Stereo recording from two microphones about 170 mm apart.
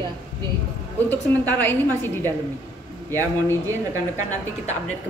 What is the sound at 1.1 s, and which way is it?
A woman's voice, 10° left (ahead or behind).